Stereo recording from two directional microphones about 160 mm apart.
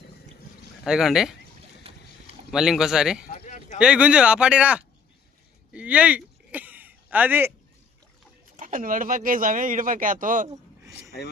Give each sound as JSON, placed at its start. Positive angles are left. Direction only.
{"t": 0.9, "sound": "speech", "side_deg": 0}
{"t": 2.5, "sound": "speech", "side_deg": -5}
{"t": 3.3, "sound": "a sound", "side_deg": 40}
{"t": 3.8, "sound": "speech", "side_deg": -5}
{"t": 5.7, "sound": "a sound", "side_deg": -10}
{"t": 8.5, "sound": "speech", "side_deg": -60}